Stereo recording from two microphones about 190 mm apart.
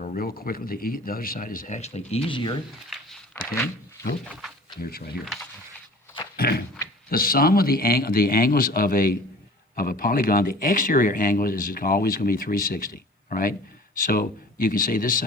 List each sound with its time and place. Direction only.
0.0 s speech: 45° left (ahead or behind); by 2.6 s 25° left (ahead or behind)
2.9 s a sound: 5° right (ahead or behind)
4.3 s speech: centre (ahead or behind)
4.8 s speech: 50° left (ahead or behind)
5.2 s speech: centre (ahead or behind)
6.3 s a sound: 55° left (ahead or behind)
7.1 s speech: 50° left (ahead or behind)